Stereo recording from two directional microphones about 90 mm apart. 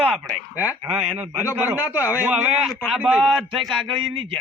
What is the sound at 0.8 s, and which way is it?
A man's voice, 25° right (ahead or behind).